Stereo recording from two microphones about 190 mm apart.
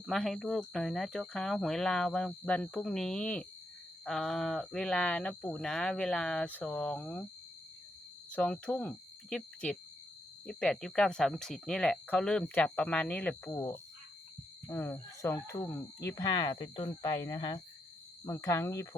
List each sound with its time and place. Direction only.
0.0 s speech: centre (ahead or behind)
8.3 s speech: 5° left (ahead or behind)